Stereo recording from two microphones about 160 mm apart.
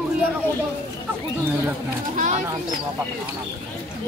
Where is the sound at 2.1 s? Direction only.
50° right (ahead or behind).